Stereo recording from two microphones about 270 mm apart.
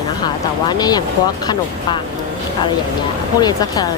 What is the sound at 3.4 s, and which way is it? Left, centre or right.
Speech, centre.